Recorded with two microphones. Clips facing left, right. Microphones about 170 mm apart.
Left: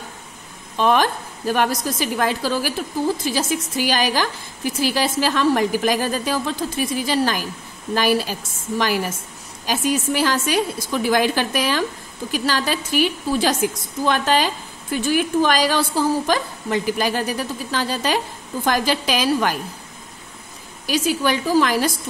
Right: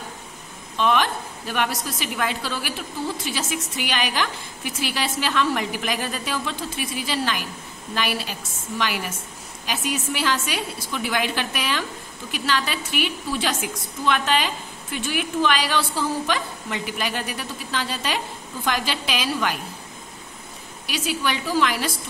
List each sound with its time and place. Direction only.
0.7 s a woman's voice: 40° left (ahead or behind)
20.8 s a woman's voice: 40° left (ahead or behind)